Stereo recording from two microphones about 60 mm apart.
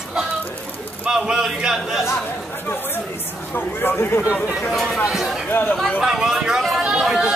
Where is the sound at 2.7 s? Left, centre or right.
Left.